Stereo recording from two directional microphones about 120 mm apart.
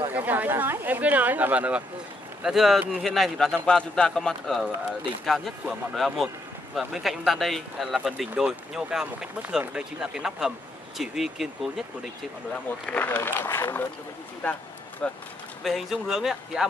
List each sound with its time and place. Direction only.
0.0 s a sound: 15° right (ahead or behind)
2.4 s speech: centre (ahead or behind)
12.8 s speech: 15° left (ahead or behind)
15.0 s speech: 5° left (ahead or behind)